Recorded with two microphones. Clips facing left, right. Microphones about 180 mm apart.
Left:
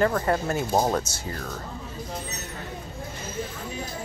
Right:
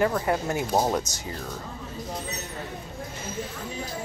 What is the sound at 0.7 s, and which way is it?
Speech, 5° left (ahead or behind).